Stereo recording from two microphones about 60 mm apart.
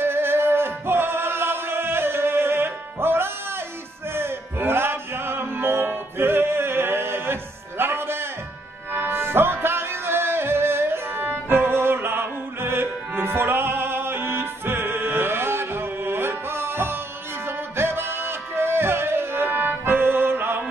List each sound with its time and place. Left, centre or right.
0.0 s music: right